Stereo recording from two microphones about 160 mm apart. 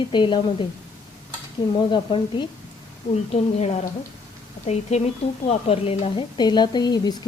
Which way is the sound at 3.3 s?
45° left (ahead or behind).